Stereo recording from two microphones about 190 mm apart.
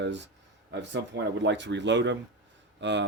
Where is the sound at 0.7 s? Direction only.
70° right (ahead or behind).